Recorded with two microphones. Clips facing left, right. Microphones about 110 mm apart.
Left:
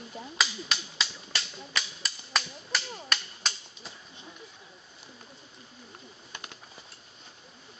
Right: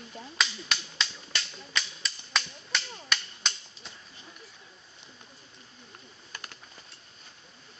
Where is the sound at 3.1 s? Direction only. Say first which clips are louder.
Right 1 dB; centre (ahead or behind).